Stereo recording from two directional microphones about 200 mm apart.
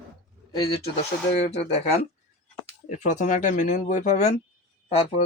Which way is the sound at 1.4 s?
30° left (ahead or behind).